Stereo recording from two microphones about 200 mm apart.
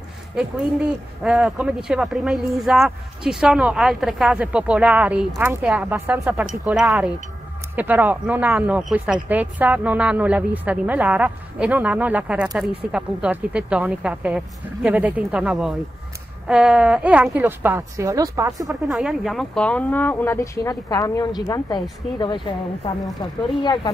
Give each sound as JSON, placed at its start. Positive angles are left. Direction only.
{"t": 1.2, "sound": "speech", "side_deg": -5}
{"t": 18.9, "sound": "a woman's voice", "side_deg": 0}
{"t": 23.6, "sound": "a woman's voice", "side_deg": 25}